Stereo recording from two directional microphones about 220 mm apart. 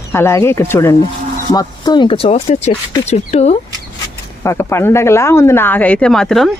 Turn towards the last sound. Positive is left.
turn(degrees=0)  # may be behind; listen again after turning